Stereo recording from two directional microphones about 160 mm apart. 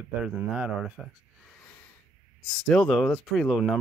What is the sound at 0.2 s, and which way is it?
Speech, 5° right (ahead or behind).